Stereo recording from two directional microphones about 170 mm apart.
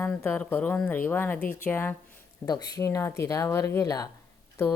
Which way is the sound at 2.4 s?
25° left (ahead or behind).